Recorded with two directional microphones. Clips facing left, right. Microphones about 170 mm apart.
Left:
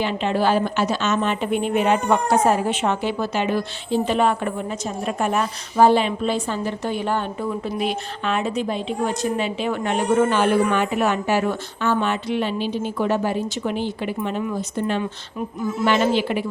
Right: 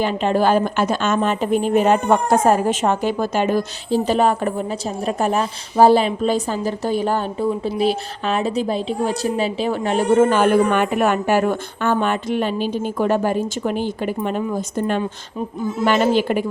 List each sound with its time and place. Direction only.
0.0 s a woman's voice: 45° right (ahead or behind)